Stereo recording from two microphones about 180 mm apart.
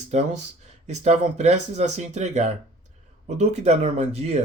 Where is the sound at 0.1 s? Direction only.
40° right (ahead or behind).